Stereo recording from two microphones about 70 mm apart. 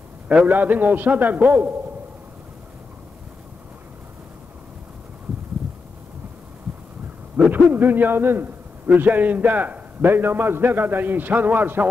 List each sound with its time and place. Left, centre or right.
0.3 s a man's voice: right
7.3 s a man's voice: centre